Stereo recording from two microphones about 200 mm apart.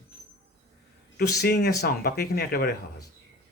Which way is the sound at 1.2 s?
55° left (ahead or behind).